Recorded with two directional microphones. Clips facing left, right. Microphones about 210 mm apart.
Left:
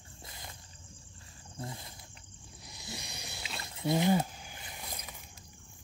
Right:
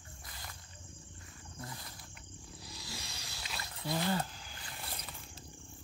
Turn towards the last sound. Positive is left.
turn(degrees=15)  # may be behind; listen again after turning